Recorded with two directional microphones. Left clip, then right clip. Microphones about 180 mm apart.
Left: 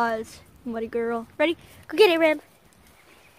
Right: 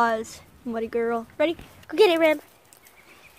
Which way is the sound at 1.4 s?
10° left (ahead or behind).